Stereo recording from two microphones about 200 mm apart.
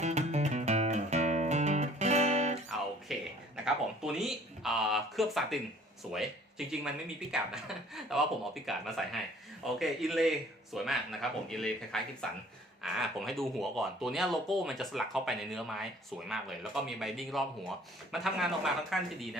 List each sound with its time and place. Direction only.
0.0 s music: 35° right (ahead or behind)
3.1 s speech: centre (ahead or behind)
6.7 s speech: 5° right (ahead or behind)